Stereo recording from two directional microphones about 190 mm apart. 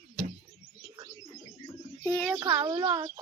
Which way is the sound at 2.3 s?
20° right (ahead or behind).